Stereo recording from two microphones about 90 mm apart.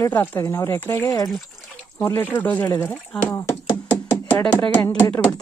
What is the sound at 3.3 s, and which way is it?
Speech, 30° left (ahead or behind).